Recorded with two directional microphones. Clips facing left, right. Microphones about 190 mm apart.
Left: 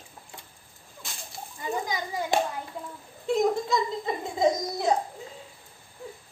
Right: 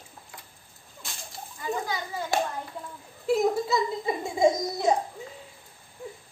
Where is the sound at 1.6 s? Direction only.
15° left (ahead or behind).